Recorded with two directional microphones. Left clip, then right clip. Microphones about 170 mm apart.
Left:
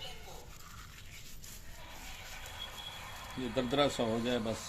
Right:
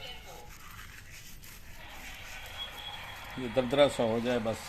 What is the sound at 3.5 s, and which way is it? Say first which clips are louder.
Speech: right 6 dB; 45° right (ahead or behind).